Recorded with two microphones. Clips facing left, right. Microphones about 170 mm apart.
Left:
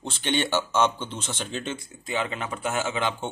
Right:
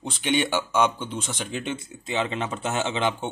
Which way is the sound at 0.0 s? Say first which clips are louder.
Right 2 dB; 10° right (ahead or behind).